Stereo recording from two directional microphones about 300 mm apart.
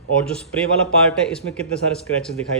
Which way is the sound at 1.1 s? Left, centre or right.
Centre.